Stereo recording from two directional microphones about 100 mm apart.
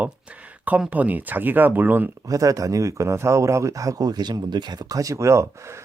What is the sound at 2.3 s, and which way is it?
A man's voice, 35° right (ahead or behind).